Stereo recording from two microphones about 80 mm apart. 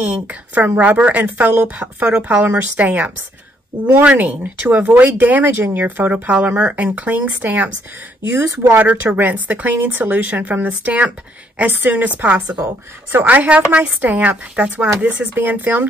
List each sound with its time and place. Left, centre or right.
0.0 s speech: centre
8.7 s speech: right